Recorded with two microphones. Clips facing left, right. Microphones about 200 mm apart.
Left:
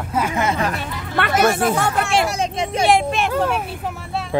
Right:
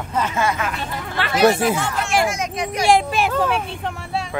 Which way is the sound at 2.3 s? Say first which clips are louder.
Left 2 dB; 30° left (ahead or behind).